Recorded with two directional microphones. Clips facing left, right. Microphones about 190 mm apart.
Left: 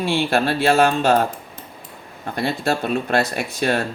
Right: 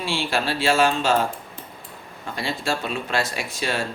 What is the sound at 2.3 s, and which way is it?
Speech, 55° left (ahead or behind).